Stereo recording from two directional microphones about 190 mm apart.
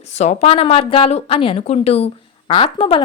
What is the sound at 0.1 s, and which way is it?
A woman's voice, 35° left (ahead or behind).